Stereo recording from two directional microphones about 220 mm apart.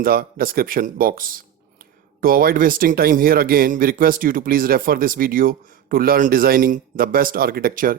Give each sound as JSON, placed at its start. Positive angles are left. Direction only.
{"t": 0.0, "sound": "speech", "side_deg": -40}